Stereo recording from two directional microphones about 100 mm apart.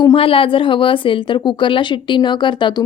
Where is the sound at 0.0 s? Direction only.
60° left (ahead or behind).